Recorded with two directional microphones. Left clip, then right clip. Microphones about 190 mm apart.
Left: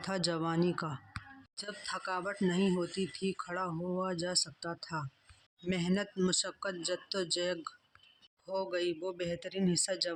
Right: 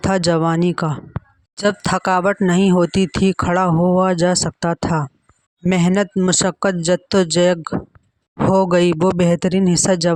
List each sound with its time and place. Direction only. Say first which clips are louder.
0.1 s speech: right 16 dB; 55° right (ahead or behind)